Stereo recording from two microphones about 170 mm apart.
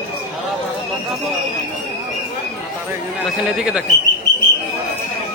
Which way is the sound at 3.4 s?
5° right (ahead or behind).